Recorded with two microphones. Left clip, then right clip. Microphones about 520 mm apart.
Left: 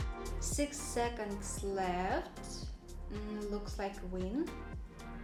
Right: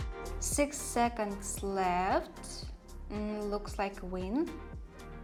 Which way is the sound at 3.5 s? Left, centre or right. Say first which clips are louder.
Right 6 dB; right.